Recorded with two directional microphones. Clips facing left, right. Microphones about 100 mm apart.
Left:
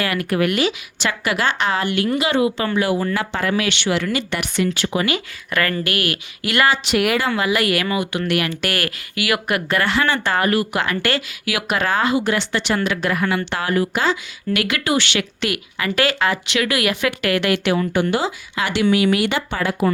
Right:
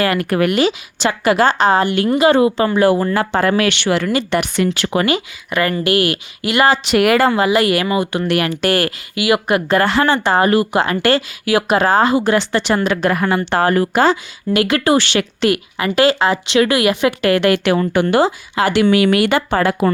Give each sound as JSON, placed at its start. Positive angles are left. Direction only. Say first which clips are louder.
{"t": 0.0, "sound": "speech", "louder": "right 4 dB", "side_deg": -40}
{"t": 0.5, "sound": "speech", "louder": "right 5 dB", "side_deg": -30}
{"t": 4.7, "sound": "speech", "louder": "right 4 dB", "side_deg": -60}
{"t": 5.5, "sound": "speech", "louder": "right 5 dB", "side_deg": -20}
{"t": 7.0, "sound": "speech", "louder": "right 9 dB", "side_deg": -55}
{"t": 7.3, "sound": "speech", "louder": "right 5 dB", "side_deg": -35}
{"t": 18.0, "sound": "speech", "louder": "right 3 dB", "side_deg": -75}
{"t": 18.3, "sound": "speech", "louder": "right 7 dB", "side_deg": -40}
{"t": 18.7, "sound": "speech", "louder": "right 3 dB", "side_deg": -60}